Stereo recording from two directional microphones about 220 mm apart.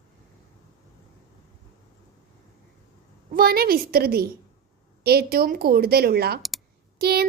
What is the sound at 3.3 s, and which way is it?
A woman's voice, 45° right (ahead or behind).